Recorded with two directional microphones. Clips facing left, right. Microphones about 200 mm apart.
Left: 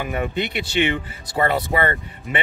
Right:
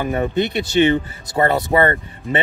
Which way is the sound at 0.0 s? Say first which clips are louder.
Right 5 dB; 40° right (ahead or behind).